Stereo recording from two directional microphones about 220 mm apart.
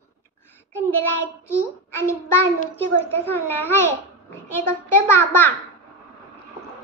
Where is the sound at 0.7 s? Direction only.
10° left (ahead or behind).